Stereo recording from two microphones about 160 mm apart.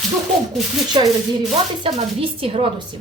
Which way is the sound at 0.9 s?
30° right (ahead or behind).